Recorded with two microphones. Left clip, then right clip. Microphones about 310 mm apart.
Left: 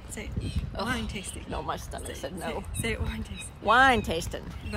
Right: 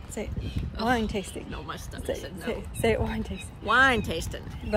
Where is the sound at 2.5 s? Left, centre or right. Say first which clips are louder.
Right 8 dB; right.